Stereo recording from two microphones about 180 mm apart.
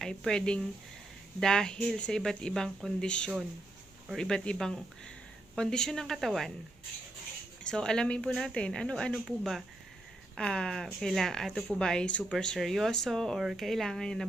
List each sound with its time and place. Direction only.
0.0 s speech: 5° left (ahead or behind)
7.6 s speech: 5° left (ahead or behind)